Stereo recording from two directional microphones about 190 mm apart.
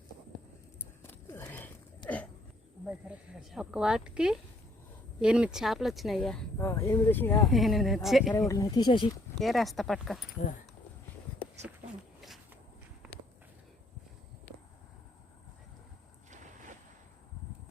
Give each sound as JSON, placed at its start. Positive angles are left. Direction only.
{"t": 1.0, "sound": "a sound", "side_deg": 10}
{"t": 2.8, "sound": "speech", "side_deg": -5}
{"t": 6.6, "sound": "speech", "side_deg": 15}
{"t": 7.4, "sound": "speech", "side_deg": 0}
{"t": 8.3, "sound": "speech", "side_deg": 20}
{"t": 9.4, "sound": "speech", "side_deg": 0}